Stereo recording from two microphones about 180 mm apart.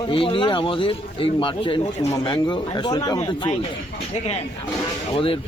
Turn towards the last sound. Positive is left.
turn(degrees=30)  # may be behind; listen again after turning